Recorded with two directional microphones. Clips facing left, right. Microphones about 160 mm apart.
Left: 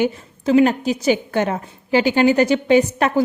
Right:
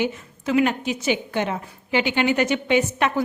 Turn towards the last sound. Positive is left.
turn(degrees=35)  # may be behind; listen again after turning